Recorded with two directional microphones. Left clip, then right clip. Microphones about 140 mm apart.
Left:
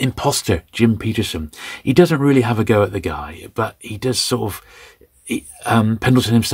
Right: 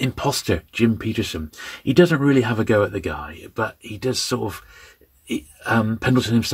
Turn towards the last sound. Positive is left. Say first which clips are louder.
# left 4 dB
turn(degrees=45)  # may be behind; listen again after turning